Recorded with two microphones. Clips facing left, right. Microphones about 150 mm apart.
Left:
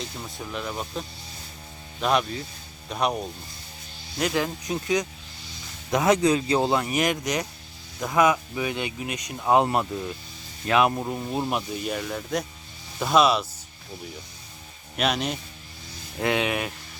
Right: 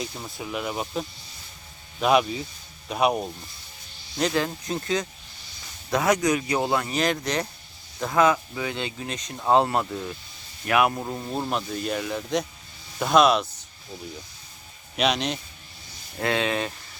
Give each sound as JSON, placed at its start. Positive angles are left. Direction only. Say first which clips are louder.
{"t": 0.0, "sound": "speech", "louder": "right 2 dB", "side_deg": -10}
{"t": 4.2, "sound": "speech", "louder": "right 1 dB", "side_deg": 10}
{"t": 11.0, "sound": "speech", "louder": "left 2 dB", "side_deg": 5}
{"t": 14.9, "sound": "speech", "louder": "right 1 dB", "side_deg": 5}
{"t": 16.2, "sound": "speech", "louder": "even", "side_deg": 15}